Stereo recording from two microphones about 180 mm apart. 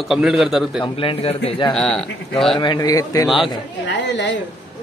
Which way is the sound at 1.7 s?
5° left (ahead or behind).